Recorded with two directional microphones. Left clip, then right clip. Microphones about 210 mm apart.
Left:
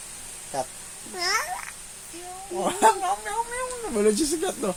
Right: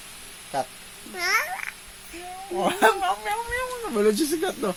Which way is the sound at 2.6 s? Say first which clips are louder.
Even; 25° right (ahead or behind).